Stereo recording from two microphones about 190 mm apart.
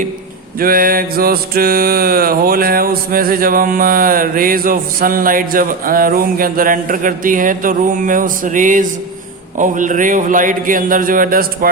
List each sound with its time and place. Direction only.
0.6 s mantra: 50° right (ahead or behind)